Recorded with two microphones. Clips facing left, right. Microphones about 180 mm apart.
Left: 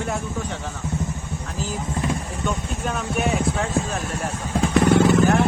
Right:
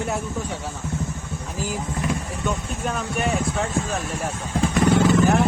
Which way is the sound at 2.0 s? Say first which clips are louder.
Left 1 dB; 30° left (ahead or behind).